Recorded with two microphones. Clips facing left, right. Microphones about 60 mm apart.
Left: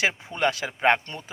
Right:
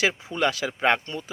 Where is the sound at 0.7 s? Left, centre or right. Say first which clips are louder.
Left 1 dB; left.